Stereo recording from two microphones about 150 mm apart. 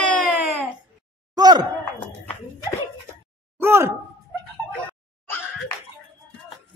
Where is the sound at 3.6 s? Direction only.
15° right (ahead or behind).